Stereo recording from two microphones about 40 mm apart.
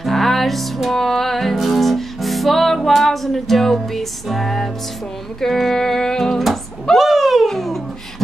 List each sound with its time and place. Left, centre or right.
0.0 s music: centre
5.4 s speech: centre
7.1 s a sound: centre